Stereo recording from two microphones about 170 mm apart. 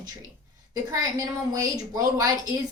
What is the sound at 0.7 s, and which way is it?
Speech, 20° right (ahead or behind).